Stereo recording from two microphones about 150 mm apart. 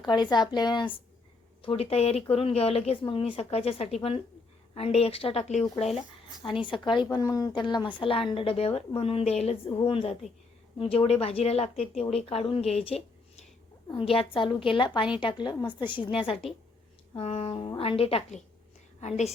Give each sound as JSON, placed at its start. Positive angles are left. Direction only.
{"t": 0.0, "sound": "a woman's voice", "side_deg": 30}
{"t": 1.6, "sound": "speech", "side_deg": 40}
{"t": 6.4, "sound": "speech", "side_deg": 35}
{"t": 17.2, "sound": "a woman's voice", "side_deg": 40}